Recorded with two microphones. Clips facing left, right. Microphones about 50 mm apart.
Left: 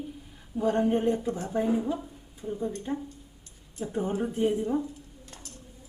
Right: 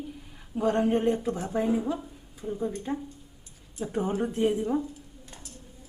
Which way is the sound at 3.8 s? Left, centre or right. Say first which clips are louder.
Right 1 dB; right.